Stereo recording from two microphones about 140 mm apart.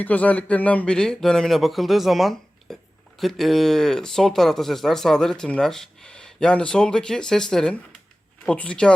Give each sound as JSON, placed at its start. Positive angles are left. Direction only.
{"t": 0.0, "sound": "speech", "side_deg": 10}